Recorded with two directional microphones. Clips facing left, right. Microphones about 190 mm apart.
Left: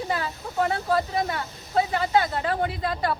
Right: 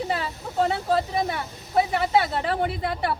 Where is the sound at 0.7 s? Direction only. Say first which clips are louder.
Right 1 dB; 25° right (ahead or behind).